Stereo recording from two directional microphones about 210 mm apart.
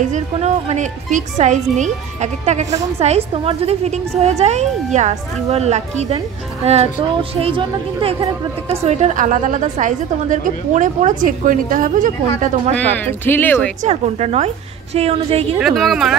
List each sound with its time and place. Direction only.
0.0 s a woman's voice: 35° right (ahead or behind)
12.7 s speech: 10° left (ahead or behind)
13.8 s a woman's voice: 30° right (ahead or behind)
15.6 s a woman's voice: centre (ahead or behind)